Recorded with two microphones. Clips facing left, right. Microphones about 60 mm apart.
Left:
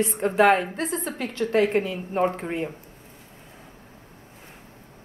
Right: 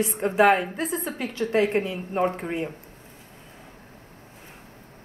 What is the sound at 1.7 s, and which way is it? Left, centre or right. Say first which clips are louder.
Speech: left 1 dB; right.